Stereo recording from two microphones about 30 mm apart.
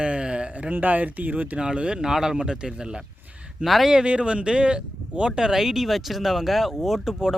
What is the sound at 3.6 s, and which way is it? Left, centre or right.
Speech, right.